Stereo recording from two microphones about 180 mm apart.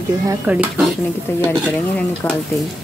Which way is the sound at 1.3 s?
10° left (ahead or behind).